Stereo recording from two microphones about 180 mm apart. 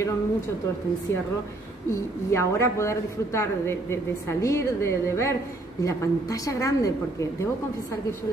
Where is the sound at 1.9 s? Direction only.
15° left (ahead or behind).